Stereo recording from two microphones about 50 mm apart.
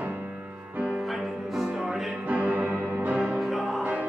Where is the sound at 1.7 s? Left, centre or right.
Centre.